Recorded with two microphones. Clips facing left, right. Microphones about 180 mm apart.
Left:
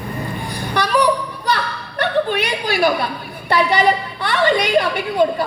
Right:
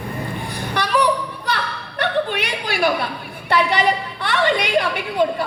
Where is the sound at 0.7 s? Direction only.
35° left (ahead or behind).